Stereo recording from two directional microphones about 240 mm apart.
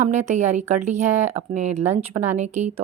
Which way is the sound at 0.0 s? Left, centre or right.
Right.